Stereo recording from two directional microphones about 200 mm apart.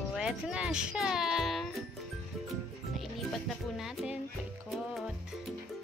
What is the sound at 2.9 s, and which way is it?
Music, centre (ahead or behind).